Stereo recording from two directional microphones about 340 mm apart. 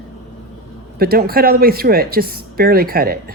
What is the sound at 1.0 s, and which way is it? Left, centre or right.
Speech, right.